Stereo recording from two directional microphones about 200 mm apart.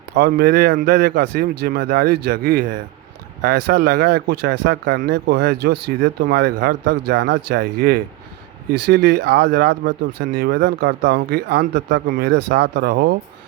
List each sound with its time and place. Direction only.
0.1 s speech: 50° right (ahead or behind)